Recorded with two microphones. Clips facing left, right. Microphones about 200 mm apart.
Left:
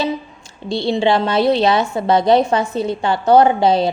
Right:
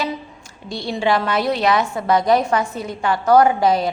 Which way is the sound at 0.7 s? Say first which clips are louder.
Left 4 dB; 25° left (ahead or behind).